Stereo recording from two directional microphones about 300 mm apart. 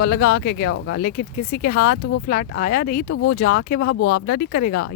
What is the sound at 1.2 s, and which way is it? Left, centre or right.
Speech, left.